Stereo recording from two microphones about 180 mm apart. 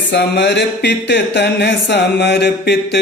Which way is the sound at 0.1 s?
75° left (ahead or behind).